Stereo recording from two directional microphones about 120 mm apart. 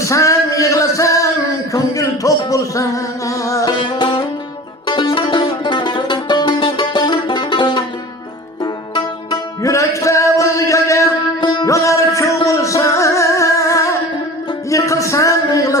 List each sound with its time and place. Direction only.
0.0 s male singing: 25° left (ahead or behind)
1.7 s a sound: 30° left (ahead or behind)
2.5 s music: 25° left (ahead or behind)
3.8 s music: 45° left (ahead or behind)
9.6 s music: 25° left (ahead or behind)
11.3 s music: 40° left (ahead or behind)
11.7 s music: 25° left (ahead or behind)
14.7 s a sound: 25° left (ahead or behind)